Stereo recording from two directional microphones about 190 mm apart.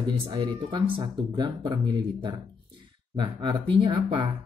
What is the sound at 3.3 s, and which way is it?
Speech, 25° right (ahead or behind).